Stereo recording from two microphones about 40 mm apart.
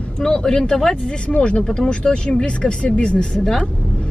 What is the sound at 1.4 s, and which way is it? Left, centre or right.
Speech, left.